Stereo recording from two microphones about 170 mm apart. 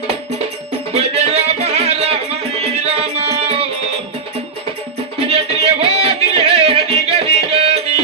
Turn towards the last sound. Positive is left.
turn(degrees=-35)  # may be behind; listen again after turning